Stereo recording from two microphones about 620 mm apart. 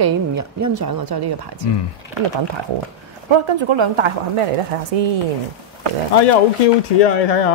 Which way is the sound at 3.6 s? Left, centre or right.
Right.